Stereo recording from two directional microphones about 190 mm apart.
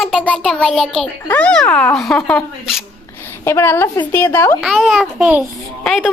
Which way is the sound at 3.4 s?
15° left (ahead or behind).